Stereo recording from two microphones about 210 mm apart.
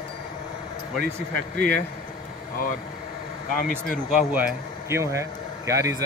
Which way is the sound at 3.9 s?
5° right (ahead or behind).